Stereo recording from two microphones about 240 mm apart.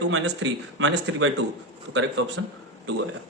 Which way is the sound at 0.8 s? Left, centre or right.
Right.